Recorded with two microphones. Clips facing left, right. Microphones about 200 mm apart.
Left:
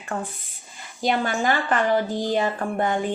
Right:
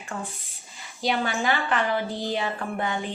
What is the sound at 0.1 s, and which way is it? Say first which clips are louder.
Speech: left 5 dB; 60° left (ahead or behind).